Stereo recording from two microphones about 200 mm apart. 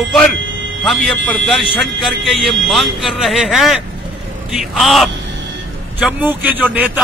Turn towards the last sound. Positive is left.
turn(degrees=-10)  # may be behind; listen again after turning